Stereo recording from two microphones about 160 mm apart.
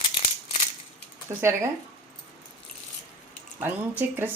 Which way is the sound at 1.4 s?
15° right (ahead or behind).